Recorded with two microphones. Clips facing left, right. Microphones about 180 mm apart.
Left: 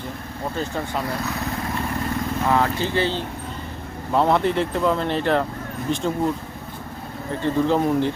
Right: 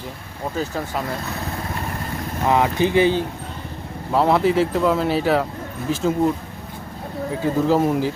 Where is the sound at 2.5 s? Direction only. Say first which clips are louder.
Right 5 dB; 15° right (ahead or behind).